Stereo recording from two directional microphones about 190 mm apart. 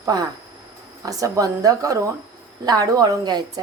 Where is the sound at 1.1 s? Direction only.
20° right (ahead or behind).